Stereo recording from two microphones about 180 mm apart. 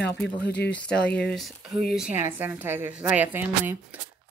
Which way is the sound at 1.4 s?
Centre (ahead or behind).